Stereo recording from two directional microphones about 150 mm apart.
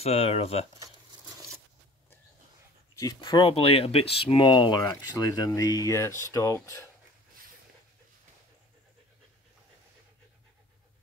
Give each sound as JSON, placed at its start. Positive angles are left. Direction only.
{"t": 0.0, "sound": "speech", "side_deg": 40}
{"t": 3.0, "sound": "speech", "side_deg": 25}